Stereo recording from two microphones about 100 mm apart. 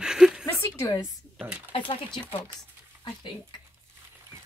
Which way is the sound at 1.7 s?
60° left (ahead or behind).